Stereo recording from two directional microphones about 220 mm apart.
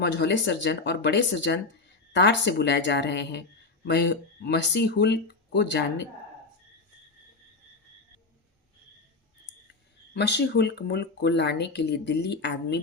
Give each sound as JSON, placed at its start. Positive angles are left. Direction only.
{"t": 0.0, "sound": "speech", "side_deg": 50}
{"t": 10.2, "sound": "speech", "side_deg": 50}